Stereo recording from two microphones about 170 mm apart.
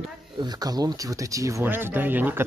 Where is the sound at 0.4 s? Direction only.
25° right (ahead or behind).